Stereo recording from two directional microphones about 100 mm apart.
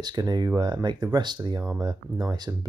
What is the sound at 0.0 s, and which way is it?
Speech, 45° right (ahead or behind).